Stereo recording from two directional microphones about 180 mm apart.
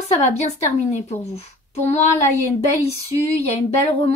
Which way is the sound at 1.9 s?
40° left (ahead or behind).